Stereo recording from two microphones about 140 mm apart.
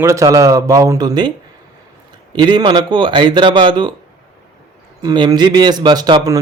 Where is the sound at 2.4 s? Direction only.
30° right (ahead or behind).